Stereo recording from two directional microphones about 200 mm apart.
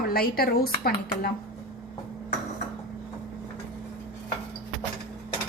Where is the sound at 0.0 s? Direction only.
50° left (ahead or behind).